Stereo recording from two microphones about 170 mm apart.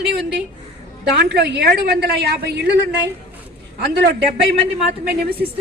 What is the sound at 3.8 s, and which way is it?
A woman's voice, 80° right.